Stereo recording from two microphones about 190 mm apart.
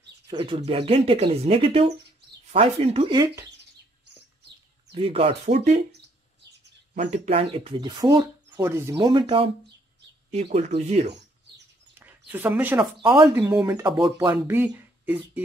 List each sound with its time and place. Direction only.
0.3 s speech: 20° right (ahead or behind)
4.9 s speech: 30° right (ahead or behind)
6.9 s speech: 35° right (ahead or behind)
12.0 s a sound: 10° right (ahead or behind)
13.0 s speech: 25° right (ahead or behind)
13.3 s speech: 15° right (ahead or behind)